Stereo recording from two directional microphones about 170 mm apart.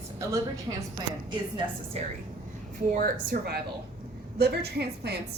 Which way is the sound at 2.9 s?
60° right (ahead or behind).